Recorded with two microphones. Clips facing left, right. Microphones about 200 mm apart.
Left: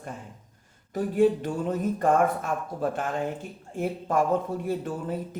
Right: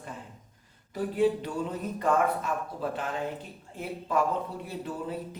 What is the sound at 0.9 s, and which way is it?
Speech, 45° left (ahead or behind).